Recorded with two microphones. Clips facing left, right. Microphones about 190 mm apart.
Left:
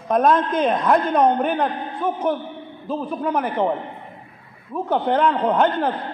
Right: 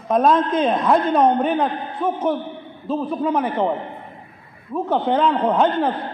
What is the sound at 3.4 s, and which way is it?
Speech, centre (ahead or behind).